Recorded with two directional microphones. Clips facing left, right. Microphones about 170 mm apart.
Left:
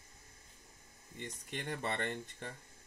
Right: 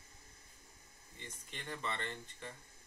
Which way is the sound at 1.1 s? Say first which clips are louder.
Left 7 dB; 50° left (ahead or behind).